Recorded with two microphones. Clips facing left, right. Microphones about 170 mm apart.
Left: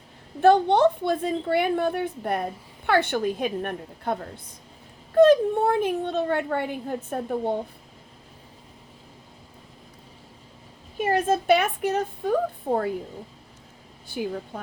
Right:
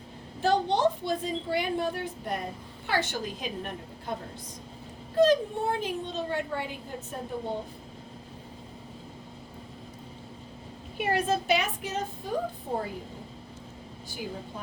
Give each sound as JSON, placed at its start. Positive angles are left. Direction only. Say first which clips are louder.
{"t": 0.4, "sound": "a woman's voice", "louder": "left 7 dB", "side_deg": 60}
{"t": 10.9, "sound": "a woman's voice", "louder": "left 4 dB", "side_deg": 45}